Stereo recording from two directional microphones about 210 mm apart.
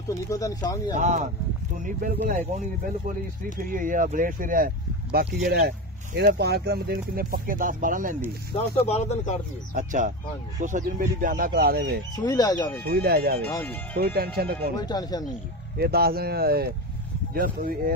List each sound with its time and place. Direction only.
0.3 s speech: 15° left (ahead or behind)
0.9 s speech: 35° right (ahead or behind)
8.5 s speech: 30° left (ahead or behind)
9.8 s speech: 35° right (ahead or behind)
12.2 s speech: 20° left (ahead or behind)
12.8 s speech: 50° right (ahead or behind)
13.5 s speech: 15° left (ahead or behind)
13.9 s speech: 45° right (ahead or behind)
14.8 s speech: 20° left (ahead or behind)
15.8 s speech: 45° right (ahead or behind)